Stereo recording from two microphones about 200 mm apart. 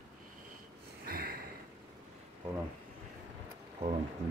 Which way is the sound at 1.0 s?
50° right (ahead or behind).